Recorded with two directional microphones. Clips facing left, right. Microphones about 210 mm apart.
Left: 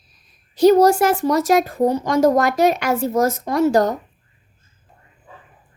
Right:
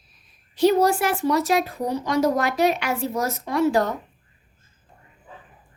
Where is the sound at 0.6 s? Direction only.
40° left (ahead or behind).